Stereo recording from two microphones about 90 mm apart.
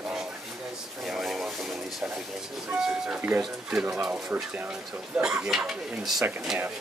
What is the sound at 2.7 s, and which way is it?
Speech, 15° right (ahead or behind).